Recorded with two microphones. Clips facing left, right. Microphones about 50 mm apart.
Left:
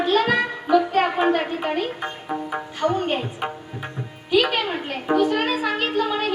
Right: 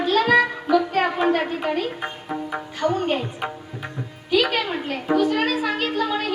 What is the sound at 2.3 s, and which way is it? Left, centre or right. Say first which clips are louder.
Music: left 1 dB; centre.